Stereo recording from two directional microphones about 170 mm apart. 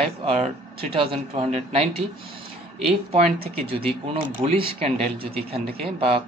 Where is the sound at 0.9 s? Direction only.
30° right (ahead or behind).